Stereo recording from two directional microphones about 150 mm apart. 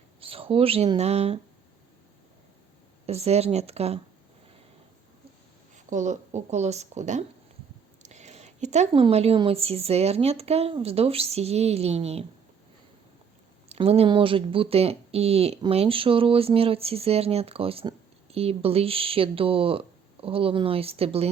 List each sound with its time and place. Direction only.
0.2 s speech: 40° right (ahead or behind)
3.1 s speech: 45° right (ahead or behind)
5.9 s speech: 50° right (ahead or behind)
8.0 s a sound: 50° right (ahead or behind)
8.9 s speech: 40° right (ahead or behind)
13.7 s speech: 40° right (ahead or behind)